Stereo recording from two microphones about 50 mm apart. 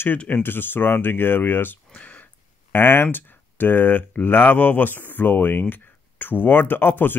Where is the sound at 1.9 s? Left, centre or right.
Left.